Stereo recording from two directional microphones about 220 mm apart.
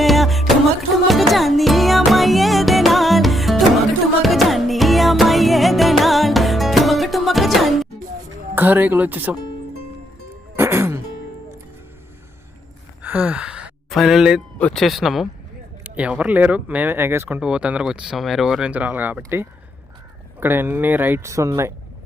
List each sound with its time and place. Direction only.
0.0 s music: centre (ahead or behind)
8.5 s speech: 10° right (ahead or behind)
10.6 s music: 10° right (ahead or behind)
13.0 s speech: 5° right (ahead or behind)